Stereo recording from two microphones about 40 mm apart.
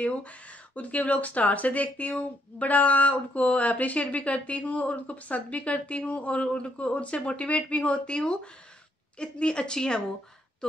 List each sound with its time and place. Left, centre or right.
0.0 s a woman's voice: left; by 10.8 s centre